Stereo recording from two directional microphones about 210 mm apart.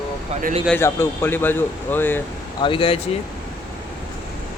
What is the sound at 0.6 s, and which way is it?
A man's voice, 10° left (ahead or behind).